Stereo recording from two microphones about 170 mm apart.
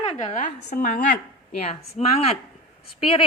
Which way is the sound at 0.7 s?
55° left (ahead or behind).